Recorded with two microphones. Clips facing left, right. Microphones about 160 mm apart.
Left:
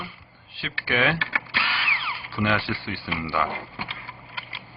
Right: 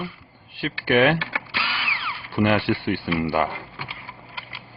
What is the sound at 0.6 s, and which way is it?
Speech, 55° right (ahead or behind).